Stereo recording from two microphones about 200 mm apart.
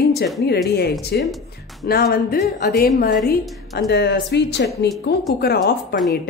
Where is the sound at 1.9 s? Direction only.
50° left (ahead or behind).